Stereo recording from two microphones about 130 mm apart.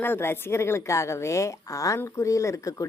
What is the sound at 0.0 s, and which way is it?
A woman's voice, 15° left (ahead or behind).